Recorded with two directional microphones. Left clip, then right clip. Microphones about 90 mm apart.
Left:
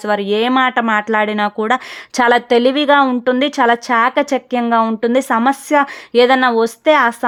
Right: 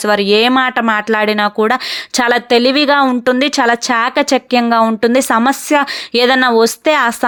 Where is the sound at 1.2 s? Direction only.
25° right (ahead or behind).